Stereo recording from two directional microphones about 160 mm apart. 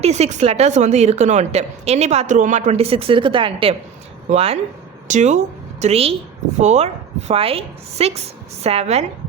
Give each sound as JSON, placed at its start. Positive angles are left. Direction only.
{"t": 0.0, "sound": "a woman's voice", "side_deg": -45}